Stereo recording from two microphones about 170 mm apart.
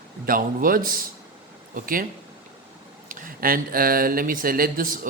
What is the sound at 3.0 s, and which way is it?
Speech, 55° right (ahead or behind).